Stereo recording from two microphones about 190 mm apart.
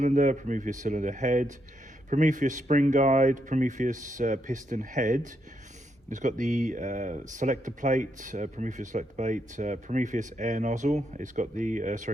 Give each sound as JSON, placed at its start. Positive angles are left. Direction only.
{"t": 0.0, "sound": "speech", "side_deg": -40}